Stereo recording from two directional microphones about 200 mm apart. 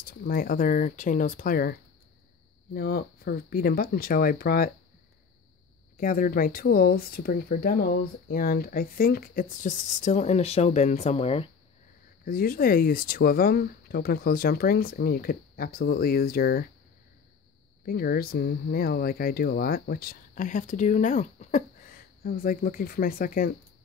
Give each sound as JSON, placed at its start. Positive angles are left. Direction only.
{"t": 0.0, "sound": "speech", "side_deg": 45}
{"t": 5.9, "sound": "speech", "side_deg": 45}
{"t": 12.3, "sound": "speech", "side_deg": 45}
{"t": 17.8, "sound": "speech", "side_deg": 50}